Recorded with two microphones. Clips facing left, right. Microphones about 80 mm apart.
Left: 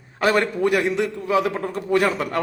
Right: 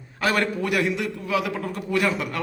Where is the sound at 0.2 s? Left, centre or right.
Left.